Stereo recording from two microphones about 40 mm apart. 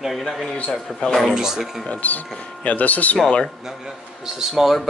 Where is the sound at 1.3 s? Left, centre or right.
Centre.